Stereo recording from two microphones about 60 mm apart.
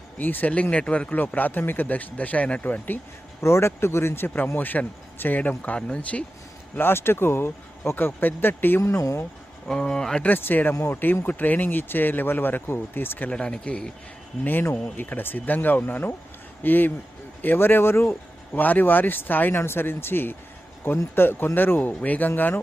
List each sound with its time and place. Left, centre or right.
0.2 s speech: left
3.4 s speech: left
4.4 s speech: left
6.7 s speech: left
8.8 s speech: left
9.6 s speech: centre
10.2 s speech: left
13.3 s speech: centre
14.7 s a man's voice: left
18.6 s speech: left